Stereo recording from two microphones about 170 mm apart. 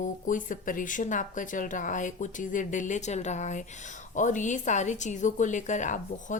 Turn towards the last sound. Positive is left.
turn(degrees=45)  # may be behind; listen again after turning